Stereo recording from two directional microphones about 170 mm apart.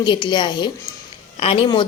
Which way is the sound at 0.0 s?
30° left (ahead or behind).